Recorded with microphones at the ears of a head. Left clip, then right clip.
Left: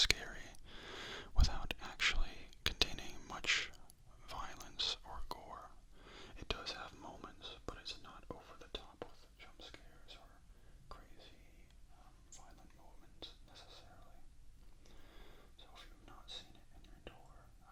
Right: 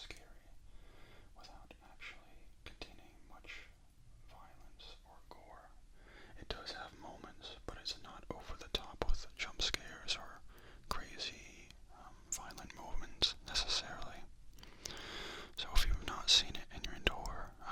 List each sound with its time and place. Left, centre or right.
0.0 s whispering: left
6.7 s whispering: centre
8.4 s whispering: right